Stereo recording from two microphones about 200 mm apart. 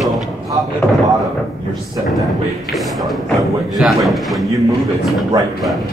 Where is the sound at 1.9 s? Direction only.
Centre (ahead or behind).